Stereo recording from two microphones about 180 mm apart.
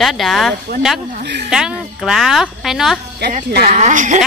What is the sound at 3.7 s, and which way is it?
Speech, 40° right (ahead or behind).